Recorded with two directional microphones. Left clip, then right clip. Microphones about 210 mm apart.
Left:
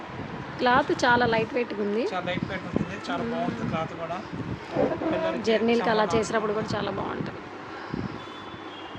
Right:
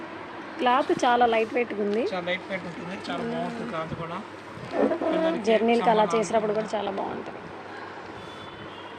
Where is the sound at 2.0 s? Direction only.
45° left (ahead or behind).